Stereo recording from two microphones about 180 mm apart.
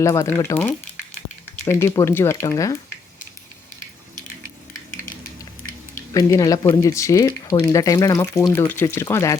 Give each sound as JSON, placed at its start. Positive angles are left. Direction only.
{"t": 0.0, "sound": "speech", "side_deg": 15}
{"t": 1.8, "sound": "speech", "side_deg": 15}
{"t": 6.3, "sound": "speech", "side_deg": 20}